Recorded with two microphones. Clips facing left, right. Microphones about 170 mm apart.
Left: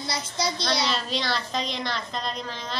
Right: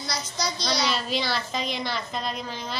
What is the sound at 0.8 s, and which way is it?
A woman's voice, 5° right (ahead or behind).